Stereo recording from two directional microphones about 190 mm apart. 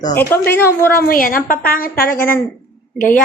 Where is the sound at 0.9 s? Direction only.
50° left (ahead or behind).